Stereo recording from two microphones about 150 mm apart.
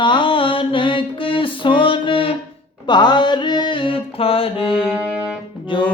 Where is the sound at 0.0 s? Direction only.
35° left (ahead or behind).